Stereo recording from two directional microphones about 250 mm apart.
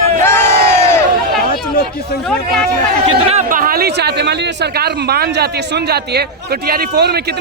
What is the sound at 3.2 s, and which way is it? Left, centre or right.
Speech, right.